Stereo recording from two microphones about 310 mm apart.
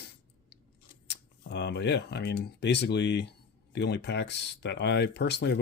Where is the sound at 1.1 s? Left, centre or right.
Left.